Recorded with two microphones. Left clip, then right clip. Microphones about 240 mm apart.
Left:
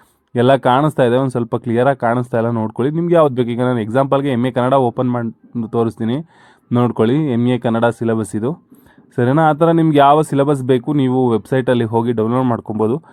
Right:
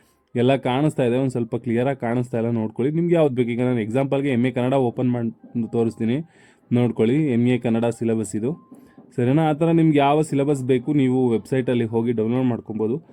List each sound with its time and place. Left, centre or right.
0.3 s speech: centre
5.0 s a man's voice: centre
6.8 s speech: centre